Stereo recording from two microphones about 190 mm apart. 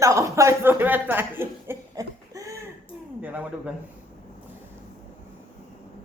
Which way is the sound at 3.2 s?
10° right (ahead or behind).